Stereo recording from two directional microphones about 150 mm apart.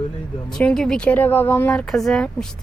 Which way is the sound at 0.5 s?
5° left (ahead or behind).